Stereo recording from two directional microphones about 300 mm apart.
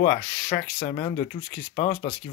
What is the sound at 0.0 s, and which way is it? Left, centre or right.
Speech, centre.